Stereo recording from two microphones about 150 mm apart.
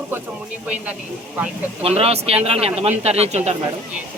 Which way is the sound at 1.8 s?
40° right (ahead or behind).